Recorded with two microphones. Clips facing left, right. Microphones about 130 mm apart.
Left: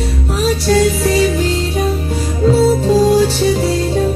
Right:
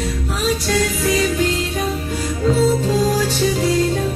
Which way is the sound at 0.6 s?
35° left (ahead or behind).